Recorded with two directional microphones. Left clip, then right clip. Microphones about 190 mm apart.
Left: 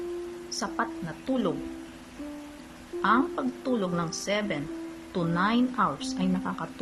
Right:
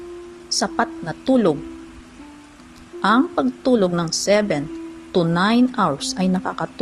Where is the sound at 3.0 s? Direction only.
20° right (ahead or behind).